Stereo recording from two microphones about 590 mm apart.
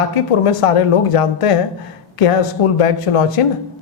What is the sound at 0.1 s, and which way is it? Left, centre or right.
Speech, left.